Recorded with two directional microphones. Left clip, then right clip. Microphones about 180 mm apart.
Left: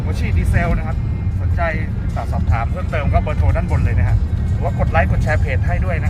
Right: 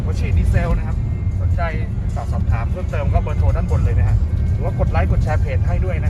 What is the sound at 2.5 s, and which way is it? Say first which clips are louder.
Speech: left 6 dB; 10° left (ahead or behind).